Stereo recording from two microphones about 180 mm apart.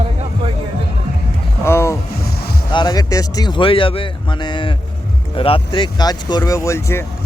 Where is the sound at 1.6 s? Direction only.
15° left (ahead or behind).